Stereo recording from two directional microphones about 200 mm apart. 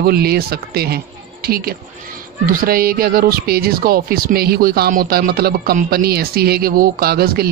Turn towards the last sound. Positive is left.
turn(degrees=-50)  # may be behind; listen again after turning